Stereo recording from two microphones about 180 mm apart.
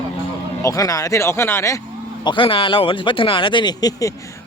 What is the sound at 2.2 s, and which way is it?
Speech, 25° left (ahead or behind).